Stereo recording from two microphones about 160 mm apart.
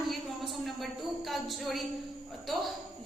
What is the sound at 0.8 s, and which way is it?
A woman's voice, centre (ahead or behind).